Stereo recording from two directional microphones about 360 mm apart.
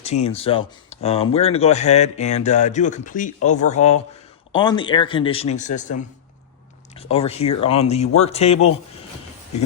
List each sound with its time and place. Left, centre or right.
0.0 s a man's voice: centre